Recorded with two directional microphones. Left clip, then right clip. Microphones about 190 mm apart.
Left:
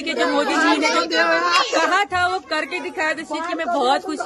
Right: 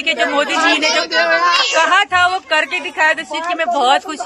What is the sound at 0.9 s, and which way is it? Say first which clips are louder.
Speech: right 4 dB; 65° left (ahead or behind).